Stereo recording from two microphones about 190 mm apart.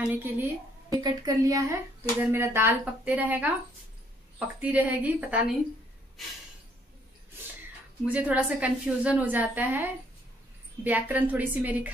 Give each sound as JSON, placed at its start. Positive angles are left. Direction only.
{"t": 0.0, "sound": "a woman's voice", "side_deg": -10}
{"t": 4.6, "sound": "a woman's voice", "side_deg": -10}
{"t": 8.0, "sound": "a woman's voice", "side_deg": -10}